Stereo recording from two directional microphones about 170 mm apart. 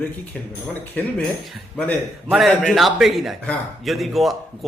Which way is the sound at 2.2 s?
Centre (ahead or behind).